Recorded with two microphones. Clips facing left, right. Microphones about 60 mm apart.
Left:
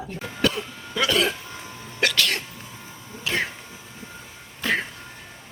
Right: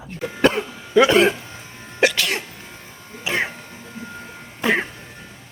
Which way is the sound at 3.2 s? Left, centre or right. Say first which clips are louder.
Right 3 dB; right.